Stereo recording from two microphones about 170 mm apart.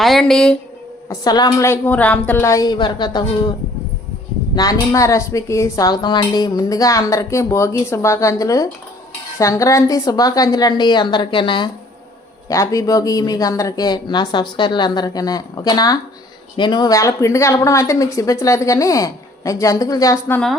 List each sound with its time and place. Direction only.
0.0 s speech: centre (ahead or behind)
1.1 s a woman's voice: 25° left (ahead or behind)
4.5 s a woman's voice: 20° left (ahead or behind)